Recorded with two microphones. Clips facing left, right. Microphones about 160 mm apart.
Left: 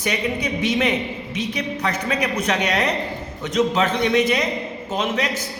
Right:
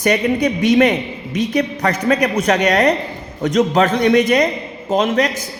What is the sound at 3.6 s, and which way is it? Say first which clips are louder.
Mantra: right 4 dB; 50° right (ahead or behind).